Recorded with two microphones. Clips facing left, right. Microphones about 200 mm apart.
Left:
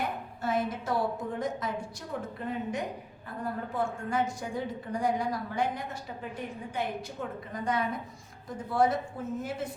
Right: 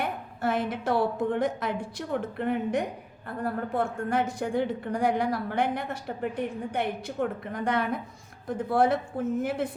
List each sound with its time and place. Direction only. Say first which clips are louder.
0.4 s a woman's voice: right 3 dB; 65° right (ahead or behind)